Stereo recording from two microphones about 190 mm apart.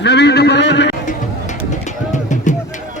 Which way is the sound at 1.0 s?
40° left (ahead or behind).